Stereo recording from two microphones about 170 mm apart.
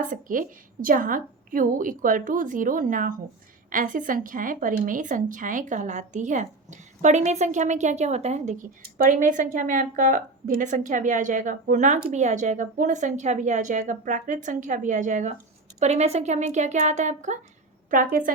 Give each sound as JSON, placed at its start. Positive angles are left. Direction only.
{"t": 0.0, "sound": "speech", "side_deg": -50}
{"t": 8.8, "sound": "speech", "side_deg": -55}